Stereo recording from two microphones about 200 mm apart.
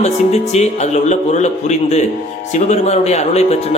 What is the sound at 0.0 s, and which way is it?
A man's voice, 35° left (ahead or behind).